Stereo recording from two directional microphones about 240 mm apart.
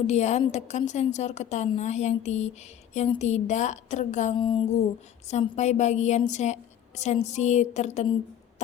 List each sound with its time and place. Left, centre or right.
0.1 s a woman's voice: left